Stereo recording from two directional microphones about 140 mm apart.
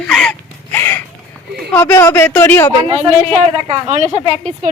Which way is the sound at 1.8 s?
20° left (ahead or behind).